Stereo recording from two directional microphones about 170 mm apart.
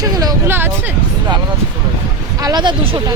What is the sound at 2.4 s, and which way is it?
Speech, 25° right (ahead or behind).